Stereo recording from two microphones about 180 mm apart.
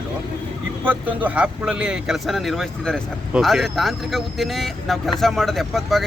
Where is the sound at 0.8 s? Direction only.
10° right (ahead or behind).